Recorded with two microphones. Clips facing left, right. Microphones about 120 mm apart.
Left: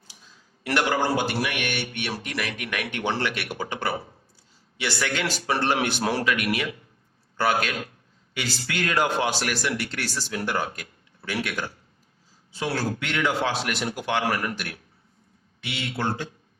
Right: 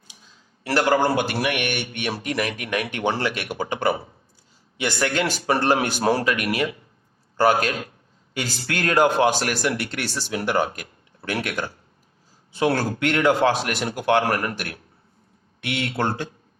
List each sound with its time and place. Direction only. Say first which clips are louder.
0.6 s a man's voice: right 4 dB; 35° right (ahead or behind)
1.0 s a man's voice: right 3 dB; 60° right (ahead or behind)
1.6 s speech: right 3 dB; 20° right (ahead or behind)
2.6 s speech: right 4 dB; 35° right (ahead or behind)
3.3 s speech: right 4 dB; 20° right (ahead or behind)
4.8 s a man's voice: right 4 dB; 45° right (ahead or behind)
8.3 s a man's voice: right 3 dB; 45° right (ahead or behind)
10.0 s speech: right 3 dB; 20° right (ahead or behind)
11.3 s a man's voice: right 3 dB; 50° right (ahead or behind)